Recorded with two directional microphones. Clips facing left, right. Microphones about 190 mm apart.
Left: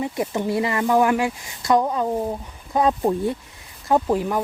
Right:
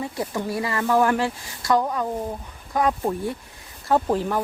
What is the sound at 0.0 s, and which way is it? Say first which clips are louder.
Speech: left 3 dB; 20° left (ahead or behind).